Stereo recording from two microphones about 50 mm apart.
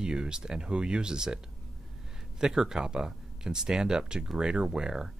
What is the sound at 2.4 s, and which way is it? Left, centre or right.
Speech, centre.